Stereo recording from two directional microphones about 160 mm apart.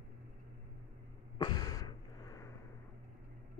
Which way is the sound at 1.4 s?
25° left (ahead or behind).